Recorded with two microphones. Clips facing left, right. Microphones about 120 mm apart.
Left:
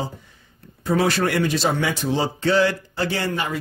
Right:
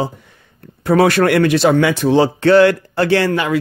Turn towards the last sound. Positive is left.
turn(degrees=-85)